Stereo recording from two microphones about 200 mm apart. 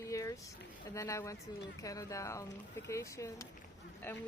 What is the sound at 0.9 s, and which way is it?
Speech, 15° left (ahead or behind).